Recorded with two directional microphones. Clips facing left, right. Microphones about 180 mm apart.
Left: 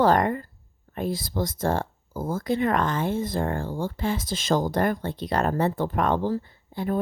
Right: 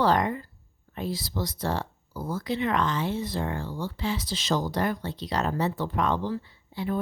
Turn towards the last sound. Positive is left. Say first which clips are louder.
# left 3 dB
turn(degrees=45)  # may be behind; listen again after turning